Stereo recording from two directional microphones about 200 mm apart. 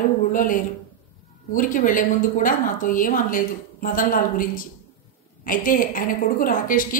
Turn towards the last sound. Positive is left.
turn(degrees=45)  # may be behind; listen again after turning